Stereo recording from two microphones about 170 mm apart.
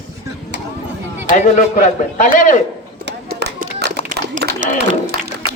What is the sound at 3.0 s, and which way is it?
Clapping, 80° right.